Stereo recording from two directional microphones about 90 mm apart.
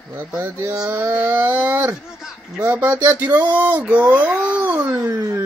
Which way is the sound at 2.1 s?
5° right (ahead or behind).